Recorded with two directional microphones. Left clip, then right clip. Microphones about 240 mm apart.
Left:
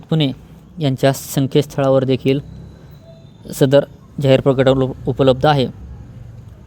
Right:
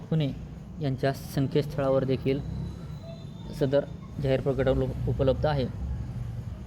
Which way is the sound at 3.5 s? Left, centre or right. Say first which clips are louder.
Left 13 dB; left.